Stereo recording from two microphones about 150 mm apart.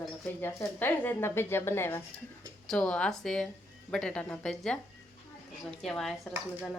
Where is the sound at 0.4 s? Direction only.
15° left (ahead or behind).